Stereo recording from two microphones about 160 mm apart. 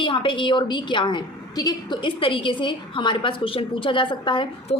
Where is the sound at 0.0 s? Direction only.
30° left (ahead or behind).